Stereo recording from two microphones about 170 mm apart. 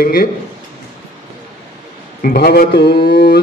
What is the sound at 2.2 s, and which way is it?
A man's voice, 65° left (ahead or behind).